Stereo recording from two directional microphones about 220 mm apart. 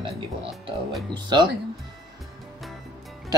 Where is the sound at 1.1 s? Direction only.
20° right (ahead or behind).